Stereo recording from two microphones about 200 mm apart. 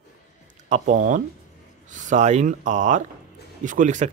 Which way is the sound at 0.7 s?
35° right (ahead or behind).